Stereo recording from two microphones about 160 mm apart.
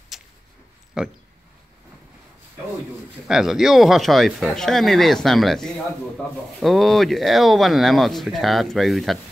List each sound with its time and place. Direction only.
0.1 s a sound: centre (ahead or behind)
1.0 s speech: 5° right (ahead or behind)
3.3 s speech: 5° right (ahead or behind)